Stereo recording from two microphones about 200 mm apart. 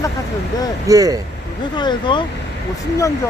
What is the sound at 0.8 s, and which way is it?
Speech, 15° right (ahead or behind).